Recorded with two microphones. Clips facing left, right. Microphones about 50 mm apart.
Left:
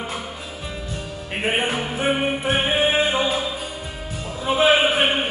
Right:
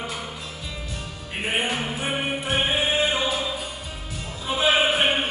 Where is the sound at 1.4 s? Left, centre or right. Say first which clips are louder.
Left 3 dB; left.